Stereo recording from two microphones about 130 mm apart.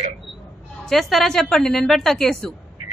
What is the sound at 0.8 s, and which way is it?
Speech, centre (ahead or behind).